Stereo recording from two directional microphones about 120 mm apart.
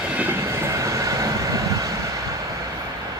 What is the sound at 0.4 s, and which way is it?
Train, 25° right (ahead or behind).